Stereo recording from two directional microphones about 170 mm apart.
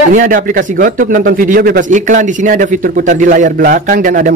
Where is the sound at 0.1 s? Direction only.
50° right (ahead or behind).